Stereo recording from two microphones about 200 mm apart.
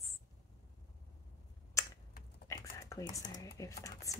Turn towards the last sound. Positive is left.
turn(degrees=15)  # may be behind; listen again after turning